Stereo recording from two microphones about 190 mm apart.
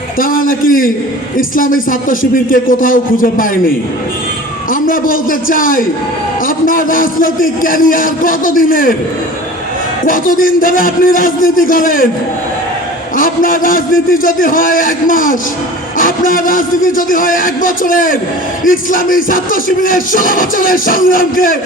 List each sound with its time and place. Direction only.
0.2 s speech: 45° left (ahead or behind)
4.7 s speech: 45° left (ahead or behind)
10.1 s speech: 45° left (ahead or behind)
13.1 s speech: 45° left (ahead or behind)